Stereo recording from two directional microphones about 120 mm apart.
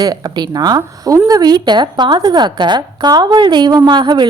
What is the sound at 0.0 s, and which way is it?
A woman's voice, 35° right (ahead or behind).